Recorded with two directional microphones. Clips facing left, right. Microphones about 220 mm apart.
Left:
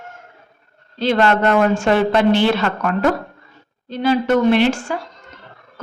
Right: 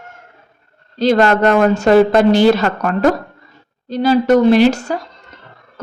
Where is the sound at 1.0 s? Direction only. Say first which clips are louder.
Right 4 dB; 40° right (ahead or behind).